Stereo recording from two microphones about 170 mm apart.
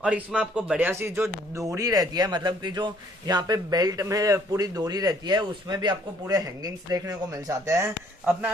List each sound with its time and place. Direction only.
0.0 s a man's voice: 5° right (ahead or behind)